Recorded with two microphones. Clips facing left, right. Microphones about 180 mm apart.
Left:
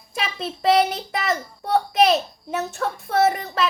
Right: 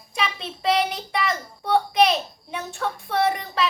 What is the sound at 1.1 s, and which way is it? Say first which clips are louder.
Speech: left 1 dB; 45° left (ahead or behind).